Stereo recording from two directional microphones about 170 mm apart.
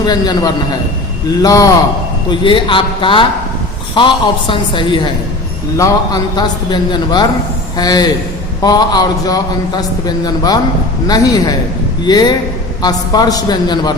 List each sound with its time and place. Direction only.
0.0 s a man's voice: 25° left (ahead or behind)